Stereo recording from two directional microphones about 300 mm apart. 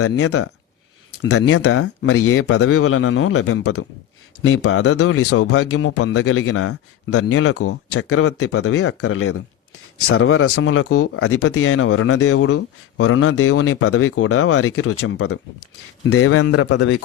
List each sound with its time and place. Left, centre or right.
0.0 s speech: left
16.6 s speech: left